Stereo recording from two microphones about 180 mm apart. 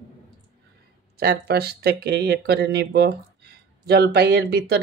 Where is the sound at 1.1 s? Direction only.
60° right (ahead or behind).